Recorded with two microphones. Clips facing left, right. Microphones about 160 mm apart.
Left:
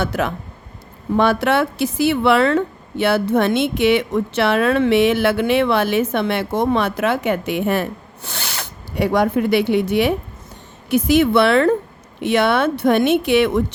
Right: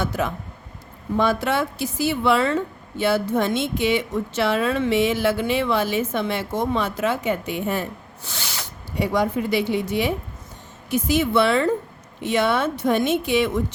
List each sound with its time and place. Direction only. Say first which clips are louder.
0.0 s speech: left 3 dB; 75° left (ahead or behind)